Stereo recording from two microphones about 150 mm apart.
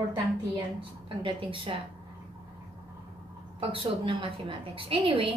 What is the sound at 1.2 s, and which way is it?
Speech, 35° right (ahead or behind).